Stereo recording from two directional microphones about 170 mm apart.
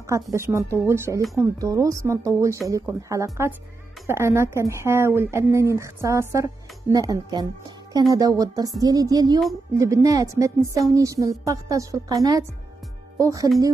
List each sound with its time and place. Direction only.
0.0 s a woman's voice: 15° right (ahead or behind)